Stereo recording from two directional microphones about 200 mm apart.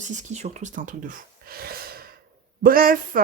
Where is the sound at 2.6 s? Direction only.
45° right (ahead or behind).